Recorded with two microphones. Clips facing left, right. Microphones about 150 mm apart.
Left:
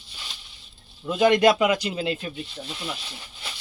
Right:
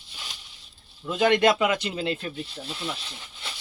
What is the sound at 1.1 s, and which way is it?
Speech, 20° left (ahead or behind).